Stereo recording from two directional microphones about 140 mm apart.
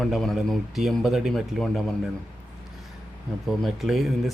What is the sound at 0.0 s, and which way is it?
Speech, centre (ahead or behind).